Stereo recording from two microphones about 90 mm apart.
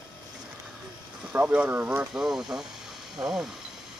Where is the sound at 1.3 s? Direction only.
15° right (ahead or behind).